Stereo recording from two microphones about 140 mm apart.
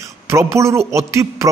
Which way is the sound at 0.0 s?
20° right (ahead or behind).